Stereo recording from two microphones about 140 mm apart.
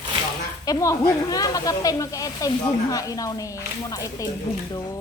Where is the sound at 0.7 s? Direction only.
20° left (ahead or behind).